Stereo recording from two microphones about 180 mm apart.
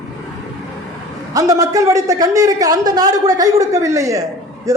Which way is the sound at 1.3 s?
20° right (ahead or behind).